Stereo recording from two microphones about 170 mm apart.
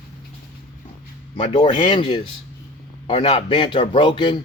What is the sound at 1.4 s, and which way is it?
A man's voice, 30° left (ahead or behind).